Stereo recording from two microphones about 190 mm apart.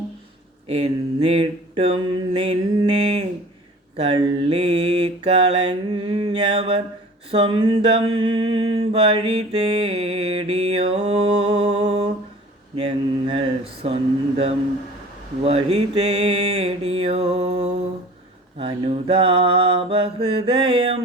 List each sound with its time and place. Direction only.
0.7 s mantra: 30° right (ahead or behind)
3.9 s mantra: 30° right (ahead or behind)